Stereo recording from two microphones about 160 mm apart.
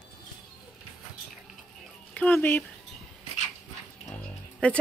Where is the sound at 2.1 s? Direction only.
10° left (ahead or behind).